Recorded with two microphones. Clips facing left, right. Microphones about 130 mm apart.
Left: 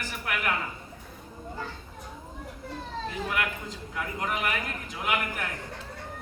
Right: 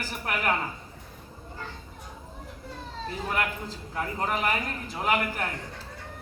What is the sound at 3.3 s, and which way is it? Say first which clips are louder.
A man's voice: right 1 dB; 35° right (ahead or behind).